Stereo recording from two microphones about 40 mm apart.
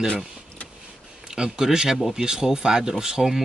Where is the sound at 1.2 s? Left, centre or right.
Centre.